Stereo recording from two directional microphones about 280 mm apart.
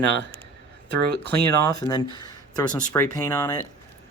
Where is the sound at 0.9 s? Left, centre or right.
Right.